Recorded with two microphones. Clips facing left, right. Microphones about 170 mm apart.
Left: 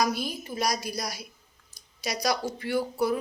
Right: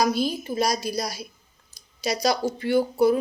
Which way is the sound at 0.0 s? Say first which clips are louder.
Right 5 dB; 30° right (ahead or behind).